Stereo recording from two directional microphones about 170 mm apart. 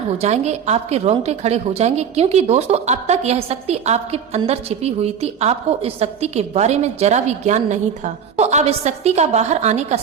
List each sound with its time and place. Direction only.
0.2 s a woman's voice: 40° right (ahead or behind)